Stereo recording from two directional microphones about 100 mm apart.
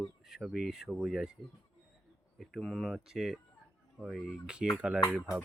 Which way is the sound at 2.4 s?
Centre (ahead or behind).